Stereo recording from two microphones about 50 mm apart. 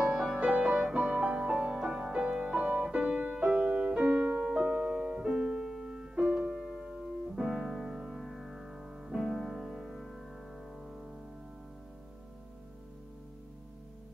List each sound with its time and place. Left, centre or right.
0.0 s music: centre
6.1 s music: right
6.5 s music: centre
10.8 s music: centre